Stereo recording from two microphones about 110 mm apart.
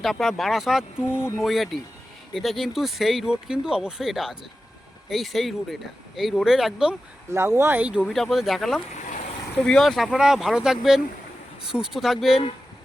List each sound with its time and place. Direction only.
0.0 s speech: centre (ahead or behind)
7.3 s speech: 25° right (ahead or behind)
8.0 s speech: centre (ahead or behind)